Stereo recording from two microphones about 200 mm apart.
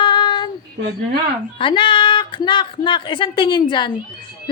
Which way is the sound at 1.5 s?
25° left (ahead or behind).